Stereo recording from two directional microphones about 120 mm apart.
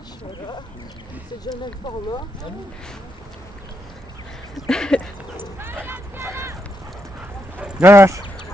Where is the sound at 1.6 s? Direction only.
40° left (ahead or behind).